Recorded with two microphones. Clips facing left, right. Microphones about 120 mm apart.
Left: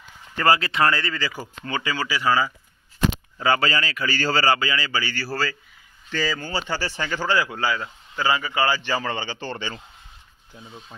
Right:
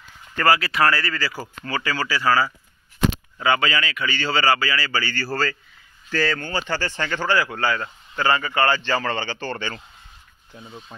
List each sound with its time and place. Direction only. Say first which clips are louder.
0.4 s speech: right 1 dB; 25° left (ahead or behind)
3.3 s speech: even; 35° left (ahead or behind)
4.5 s speech: right 1 dB; 25° left (ahead or behind)
10.5 s speech: right 2 dB; 10° right (ahead or behind)